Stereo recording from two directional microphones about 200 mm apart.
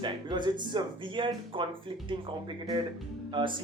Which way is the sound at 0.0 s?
20° right (ahead or behind).